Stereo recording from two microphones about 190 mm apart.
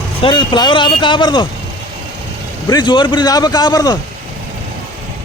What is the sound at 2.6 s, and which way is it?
Speech, 20° left (ahead or behind).